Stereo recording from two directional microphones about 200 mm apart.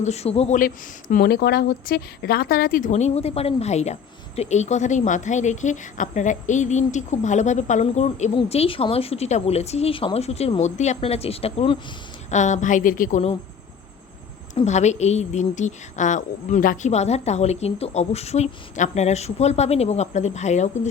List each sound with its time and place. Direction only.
0.0 s a woman's voice: 35° left (ahead or behind)
14.5 s a woman's voice: 35° left (ahead or behind)